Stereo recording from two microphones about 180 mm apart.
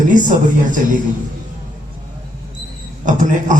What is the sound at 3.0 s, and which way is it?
Speech, 45° right (ahead or behind).